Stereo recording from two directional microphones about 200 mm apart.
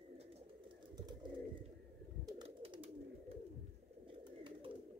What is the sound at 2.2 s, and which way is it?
Bird, 25° right (ahead or behind).